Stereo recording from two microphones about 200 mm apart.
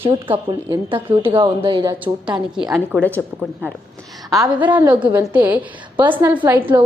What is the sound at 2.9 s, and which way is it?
Speech, 10° left (ahead or behind).